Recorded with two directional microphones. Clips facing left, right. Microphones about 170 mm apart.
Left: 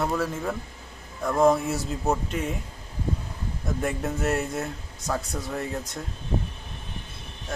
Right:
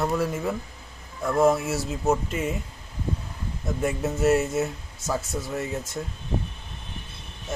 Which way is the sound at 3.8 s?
5° right (ahead or behind).